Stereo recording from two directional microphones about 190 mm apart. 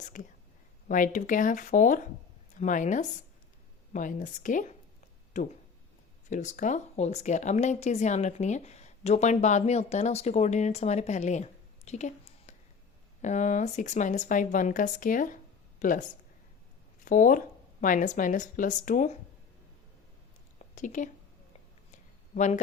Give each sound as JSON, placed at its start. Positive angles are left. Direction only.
{"t": 0.1, "sound": "speech", "side_deg": 45}
{"t": 11.9, "sound": "a sound", "side_deg": 35}
{"t": 13.2, "sound": "speech", "side_deg": 40}
{"t": 17.1, "sound": "speech", "side_deg": 45}
{"t": 20.7, "sound": "speech", "side_deg": 40}
{"t": 21.9, "sound": "a sound", "side_deg": 40}